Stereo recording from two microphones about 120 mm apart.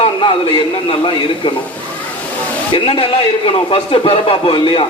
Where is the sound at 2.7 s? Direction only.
50° left (ahead or behind).